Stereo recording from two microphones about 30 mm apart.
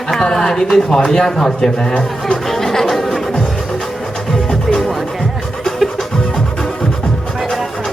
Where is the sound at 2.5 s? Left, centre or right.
Centre.